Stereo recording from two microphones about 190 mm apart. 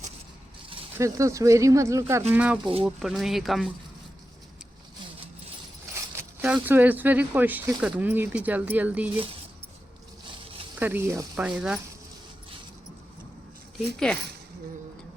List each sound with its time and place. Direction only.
0.9 s speech: 15° right (ahead or behind); by 3.7 s centre (ahead or behind)
5.9 s speech: 10° right (ahead or behind)
10.8 s speech: 10° right (ahead or behind)
13.7 s speech: 5° left (ahead or behind)